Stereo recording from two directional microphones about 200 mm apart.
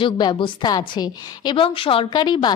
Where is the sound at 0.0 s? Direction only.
25° left (ahead or behind).